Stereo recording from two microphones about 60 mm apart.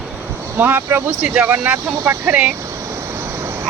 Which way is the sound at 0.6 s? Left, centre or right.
Right.